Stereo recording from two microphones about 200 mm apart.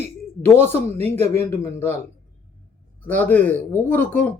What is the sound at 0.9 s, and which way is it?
Speech, 30° right (ahead or behind).